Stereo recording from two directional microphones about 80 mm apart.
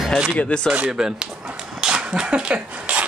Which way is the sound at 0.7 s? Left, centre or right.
Centre.